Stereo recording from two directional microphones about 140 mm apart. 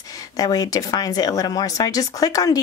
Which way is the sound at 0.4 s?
25° left (ahead or behind).